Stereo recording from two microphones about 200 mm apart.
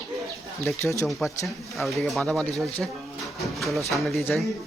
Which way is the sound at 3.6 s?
Centre (ahead or behind).